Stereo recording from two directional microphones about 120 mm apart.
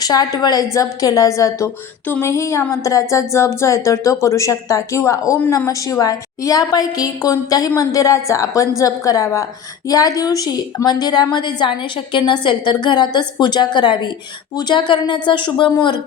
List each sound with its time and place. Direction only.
0.0 s a woman's voice: 35° left (ahead or behind)